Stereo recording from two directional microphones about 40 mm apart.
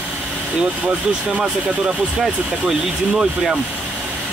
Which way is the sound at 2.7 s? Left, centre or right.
Centre.